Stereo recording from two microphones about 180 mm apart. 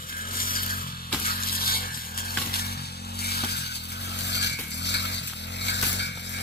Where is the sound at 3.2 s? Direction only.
60° left (ahead or behind).